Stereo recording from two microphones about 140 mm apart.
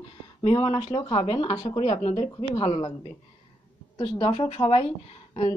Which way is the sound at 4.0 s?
40° left (ahead or behind).